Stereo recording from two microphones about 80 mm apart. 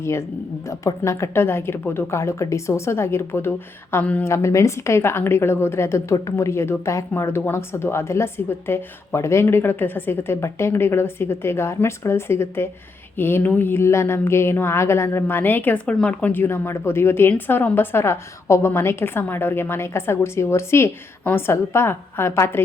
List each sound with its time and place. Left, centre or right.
0.0 s a woman's voice: left